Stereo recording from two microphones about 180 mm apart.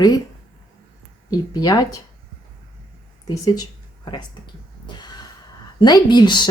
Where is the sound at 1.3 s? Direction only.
20° left (ahead or behind).